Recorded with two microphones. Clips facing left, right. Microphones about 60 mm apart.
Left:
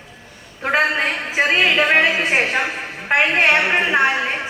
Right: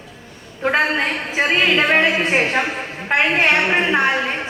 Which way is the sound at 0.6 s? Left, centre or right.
Centre.